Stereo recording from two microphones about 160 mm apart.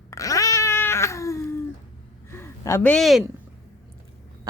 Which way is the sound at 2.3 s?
15° left (ahead or behind).